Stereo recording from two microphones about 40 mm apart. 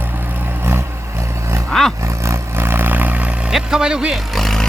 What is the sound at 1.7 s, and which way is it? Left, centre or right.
Roar, centre.